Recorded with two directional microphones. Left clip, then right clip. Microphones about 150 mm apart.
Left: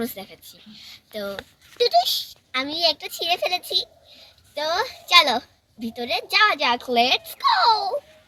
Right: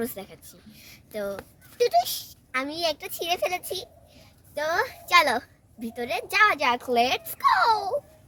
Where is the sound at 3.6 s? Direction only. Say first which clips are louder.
Left 10 dB; 45° right (ahead or behind).